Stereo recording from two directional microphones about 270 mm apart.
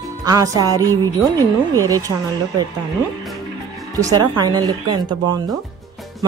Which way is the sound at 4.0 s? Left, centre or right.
Centre.